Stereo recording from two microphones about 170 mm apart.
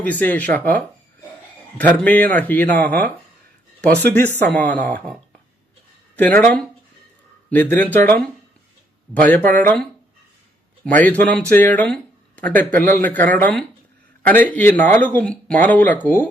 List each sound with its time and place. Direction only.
0.0 s speech: 10° left (ahead or behind)
4.1 s speech: 10° left (ahead or behind)
6.1 s speech: 10° left (ahead or behind)
9.4 s speech: 50° right (ahead or behind)
10.8 s speech: 10° left (ahead or behind)